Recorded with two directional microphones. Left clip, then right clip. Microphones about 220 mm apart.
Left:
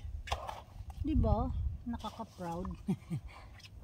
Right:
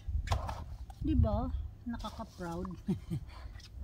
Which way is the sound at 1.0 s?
15° left (ahead or behind).